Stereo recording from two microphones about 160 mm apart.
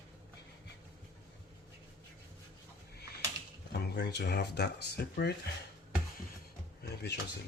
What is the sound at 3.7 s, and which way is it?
Speech, 90° left.